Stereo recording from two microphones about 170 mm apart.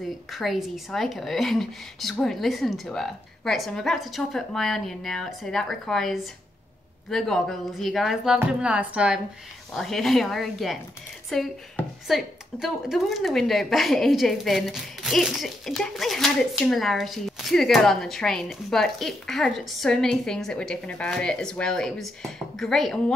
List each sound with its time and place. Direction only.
0.3 s a woman's voice: centre (ahead or behind)